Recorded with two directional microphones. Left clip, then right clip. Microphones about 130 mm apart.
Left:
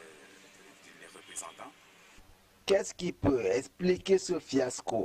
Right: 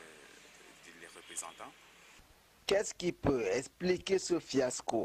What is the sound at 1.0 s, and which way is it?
Speech, 15° right (ahead or behind).